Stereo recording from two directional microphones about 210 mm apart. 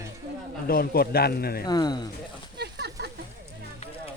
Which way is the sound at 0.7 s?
45° left (ahead or behind).